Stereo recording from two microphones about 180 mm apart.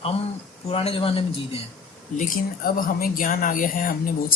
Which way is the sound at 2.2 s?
50° left (ahead or behind).